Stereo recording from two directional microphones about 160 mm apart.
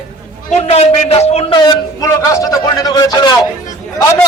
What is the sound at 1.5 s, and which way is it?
A man's voice, 25° left (ahead or behind).